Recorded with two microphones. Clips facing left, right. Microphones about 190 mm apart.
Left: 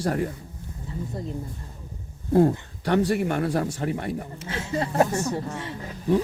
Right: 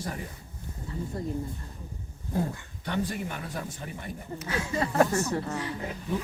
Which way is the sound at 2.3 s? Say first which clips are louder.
Left 12 dB; 70° left (ahead or behind).